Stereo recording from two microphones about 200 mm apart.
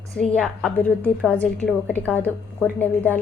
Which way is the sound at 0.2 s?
5° left (ahead or behind).